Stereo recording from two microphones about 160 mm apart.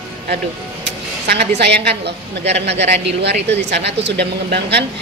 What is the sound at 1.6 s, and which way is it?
A woman's voice, 90° right.